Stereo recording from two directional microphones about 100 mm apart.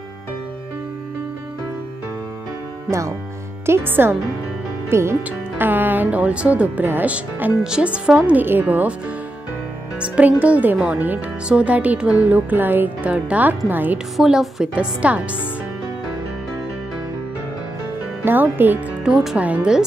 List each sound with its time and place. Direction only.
2.9 s speech: 30° right (ahead or behind)
9.9 s speech: 10° right (ahead or behind)
14.1 s speech: centre (ahead or behind)
18.2 s speech: 20° right (ahead or behind)
19.0 s speech: 5° right (ahead or behind)